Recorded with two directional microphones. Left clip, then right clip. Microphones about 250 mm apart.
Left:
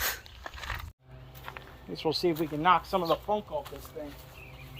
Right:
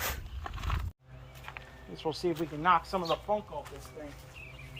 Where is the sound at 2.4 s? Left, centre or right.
Left.